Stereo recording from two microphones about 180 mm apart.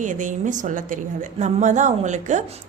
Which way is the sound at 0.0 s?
45° right (ahead or behind).